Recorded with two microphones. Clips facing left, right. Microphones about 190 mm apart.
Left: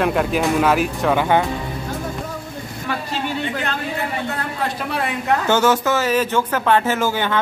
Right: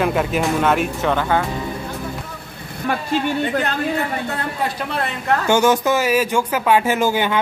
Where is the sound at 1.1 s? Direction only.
15° left (ahead or behind).